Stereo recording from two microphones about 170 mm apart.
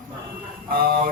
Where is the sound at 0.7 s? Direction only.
60° right (ahead or behind).